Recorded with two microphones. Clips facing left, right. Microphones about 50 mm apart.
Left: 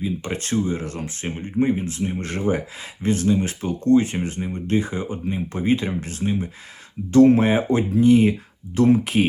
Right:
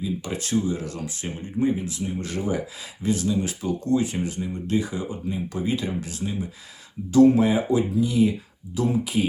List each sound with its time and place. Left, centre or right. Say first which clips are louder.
0.0 s speech: left 2 dB; left